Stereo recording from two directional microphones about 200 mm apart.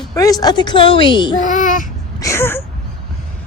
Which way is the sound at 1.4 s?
40° left (ahead or behind).